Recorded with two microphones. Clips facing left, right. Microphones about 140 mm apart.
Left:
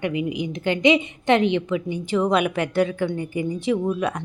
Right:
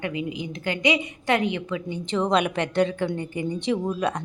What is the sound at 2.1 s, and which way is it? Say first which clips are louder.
Speech: left 2 dB; 5° left (ahead or behind).